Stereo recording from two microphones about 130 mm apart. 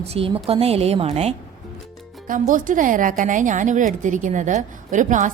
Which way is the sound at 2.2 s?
90° right.